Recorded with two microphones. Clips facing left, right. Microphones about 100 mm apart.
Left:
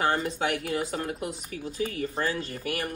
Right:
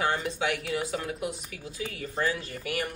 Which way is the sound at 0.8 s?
40° left (ahead or behind).